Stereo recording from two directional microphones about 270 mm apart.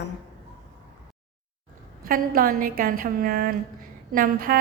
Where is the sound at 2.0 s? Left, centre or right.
Right.